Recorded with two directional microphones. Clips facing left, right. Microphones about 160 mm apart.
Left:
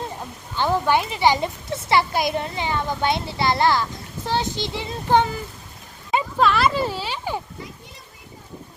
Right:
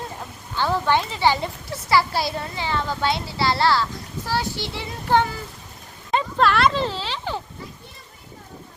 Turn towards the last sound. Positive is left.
turn(degrees=10)  # may be behind; listen again after turning